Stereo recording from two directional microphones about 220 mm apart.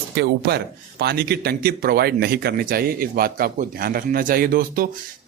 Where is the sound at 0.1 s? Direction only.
50° right (ahead or behind).